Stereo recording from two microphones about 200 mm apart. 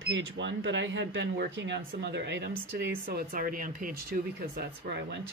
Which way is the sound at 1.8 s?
50° right (ahead or behind).